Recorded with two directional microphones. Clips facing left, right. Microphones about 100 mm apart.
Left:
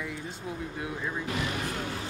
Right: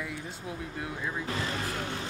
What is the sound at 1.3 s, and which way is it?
Speech, 30° right (ahead or behind).